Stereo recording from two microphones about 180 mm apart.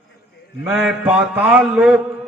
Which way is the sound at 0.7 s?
10° right (ahead or behind).